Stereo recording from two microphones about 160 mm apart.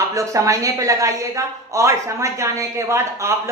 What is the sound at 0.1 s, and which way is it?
Speech, 20° right (ahead or behind).